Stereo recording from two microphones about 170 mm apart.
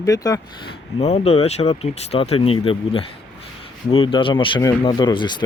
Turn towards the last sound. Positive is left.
turn(degrees=25)  # may be behind; listen again after turning